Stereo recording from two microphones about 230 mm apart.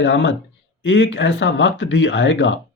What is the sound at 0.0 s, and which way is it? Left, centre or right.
Speech, left.